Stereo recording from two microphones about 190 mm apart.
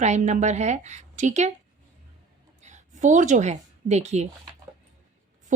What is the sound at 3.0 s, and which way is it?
Speech, 40° right (ahead or behind).